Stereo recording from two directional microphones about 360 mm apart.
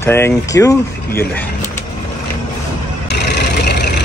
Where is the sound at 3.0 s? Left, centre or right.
Left.